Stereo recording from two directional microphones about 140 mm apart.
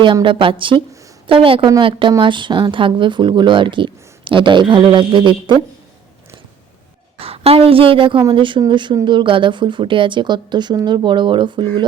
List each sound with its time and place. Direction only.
0.0 s speech: 35° right (ahead or behind)
7.2 s a woman's voice: 45° right (ahead or behind)